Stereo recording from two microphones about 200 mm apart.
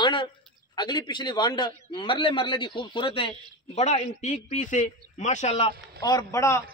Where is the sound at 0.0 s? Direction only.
25° left (ahead or behind).